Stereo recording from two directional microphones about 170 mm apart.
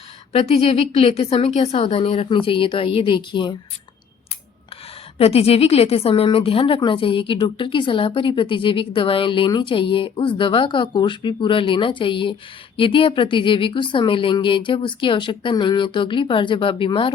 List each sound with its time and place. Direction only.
0.3 s a woman's voice: 35° left (ahead or behind)
5.1 s speech: 35° left (ahead or behind)